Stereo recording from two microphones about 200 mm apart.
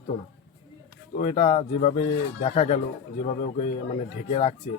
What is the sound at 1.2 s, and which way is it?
A man's voice, 30° left (ahead or behind).